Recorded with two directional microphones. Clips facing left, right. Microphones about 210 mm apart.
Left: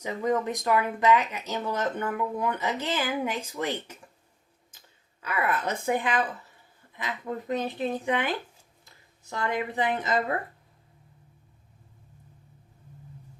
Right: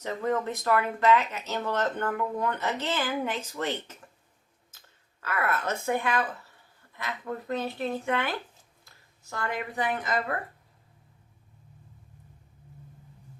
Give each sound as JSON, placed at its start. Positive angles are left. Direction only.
{"t": 0.0, "sound": "speech", "side_deg": 10}
{"t": 5.2, "sound": "speech", "side_deg": 15}
{"t": 9.3, "sound": "a woman's voice", "side_deg": 20}